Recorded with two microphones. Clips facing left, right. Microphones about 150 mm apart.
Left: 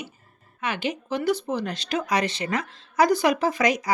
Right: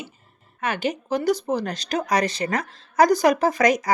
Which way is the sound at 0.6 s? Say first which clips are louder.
Right 3 dB; 45° right (ahead or behind).